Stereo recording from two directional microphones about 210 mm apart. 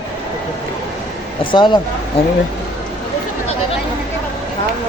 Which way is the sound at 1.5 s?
20° left (ahead or behind).